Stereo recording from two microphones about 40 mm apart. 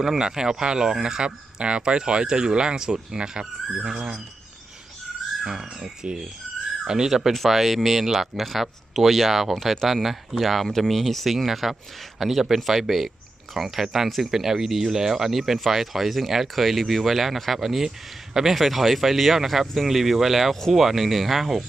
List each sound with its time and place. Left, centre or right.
0.0 s speech: centre
5.5 s speech: centre